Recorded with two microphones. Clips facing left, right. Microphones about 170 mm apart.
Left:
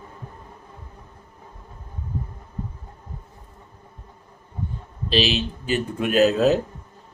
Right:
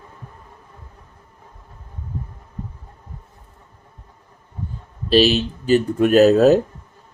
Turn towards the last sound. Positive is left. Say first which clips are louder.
# right 6 dB
turn(degrees=-40)  # may be behind; listen again after turning